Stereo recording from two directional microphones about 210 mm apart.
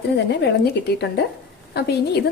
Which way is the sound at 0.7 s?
50° left (ahead or behind).